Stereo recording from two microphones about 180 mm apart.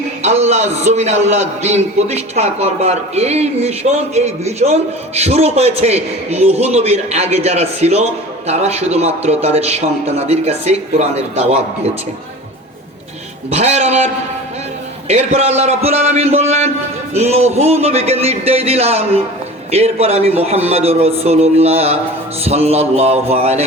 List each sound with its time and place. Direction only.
0.2 s a man's voice: 40° right (ahead or behind)
13.5 s a man's voice: 35° right (ahead or behind)